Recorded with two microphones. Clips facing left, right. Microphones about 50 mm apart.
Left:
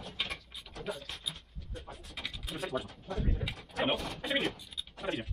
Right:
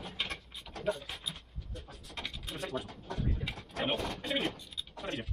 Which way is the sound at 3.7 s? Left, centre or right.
Centre.